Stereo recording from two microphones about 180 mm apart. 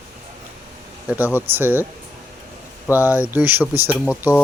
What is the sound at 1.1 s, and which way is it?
Speech, 10° right (ahead or behind).